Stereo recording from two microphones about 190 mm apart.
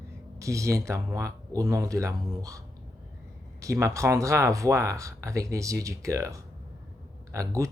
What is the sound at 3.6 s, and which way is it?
Speech, 15° right (ahead or behind).